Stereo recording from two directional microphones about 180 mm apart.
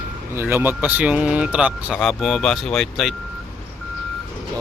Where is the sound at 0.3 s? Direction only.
10° right (ahead or behind).